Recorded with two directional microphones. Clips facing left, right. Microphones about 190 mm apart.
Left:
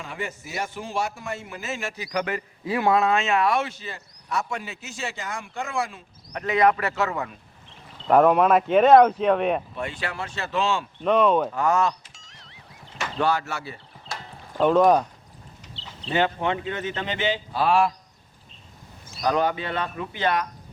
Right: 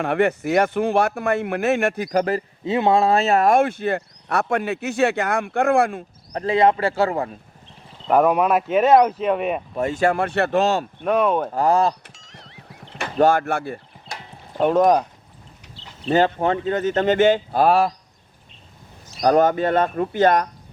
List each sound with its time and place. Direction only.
0.0 s speech: 65° right (ahead or behind); by 2.4 s 40° right (ahead or behind)
2.6 s speech: 25° right (ahead or behind); by 6.1 s 55° right (ahead or behind)
6.3 s speech: 30° right (ahead or behind)
8.0 s speech: 5° right (ahead or behind)
9.7 s speech: 45° right (ahead or behind); by 10.6 s 60° right (ahead or behind)
10.6 s speech: 40° right (ahead or behind)
11.0 s speech: 10° right (ahead or behind)
11.5 s speech: 35° right (ahead or behind)
12.1 s music: centre (ahead or behind)
13.1 s speech: 50° right (ahead or behind)
14.6 s speech: 20° right (ahead or behind)
16.0 s speech: 40° right (ahead or behind)
19.2 s speech: 45° right (ahead or behind)